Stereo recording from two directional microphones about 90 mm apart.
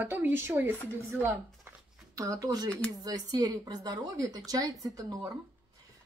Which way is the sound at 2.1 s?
35° right (ahead or behind).